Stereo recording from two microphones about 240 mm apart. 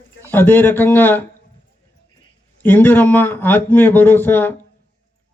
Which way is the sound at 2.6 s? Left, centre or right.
Centre.